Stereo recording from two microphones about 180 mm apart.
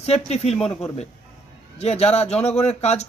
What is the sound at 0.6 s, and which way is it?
Speech, 35° left (ahead or behind).